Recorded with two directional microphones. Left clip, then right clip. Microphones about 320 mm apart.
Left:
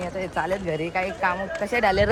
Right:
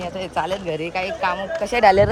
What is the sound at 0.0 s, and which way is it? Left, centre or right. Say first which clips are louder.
Speech: right 3 dB; centre.